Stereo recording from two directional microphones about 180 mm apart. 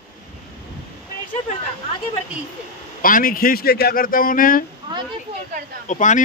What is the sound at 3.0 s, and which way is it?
A man's voice, 50° left (ahead or behind).